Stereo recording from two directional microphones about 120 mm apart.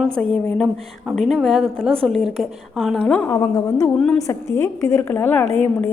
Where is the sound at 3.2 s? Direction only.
25° left (ahead or behind).